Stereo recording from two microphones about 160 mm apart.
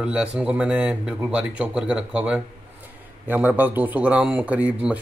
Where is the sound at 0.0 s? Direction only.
5° right (ahead or behind).